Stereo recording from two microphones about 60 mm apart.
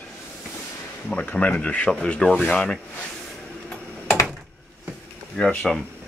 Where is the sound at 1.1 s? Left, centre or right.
Left.